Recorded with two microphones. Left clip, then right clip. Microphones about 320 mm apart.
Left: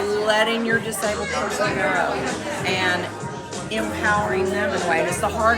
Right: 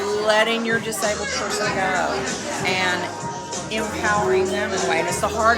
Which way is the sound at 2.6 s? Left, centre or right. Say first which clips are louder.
Even; centre.